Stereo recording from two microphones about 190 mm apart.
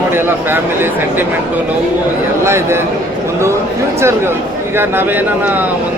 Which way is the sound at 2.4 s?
15° right (ahead or behind).